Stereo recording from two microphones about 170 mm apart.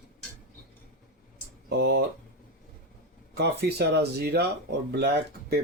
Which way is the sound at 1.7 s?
80° right.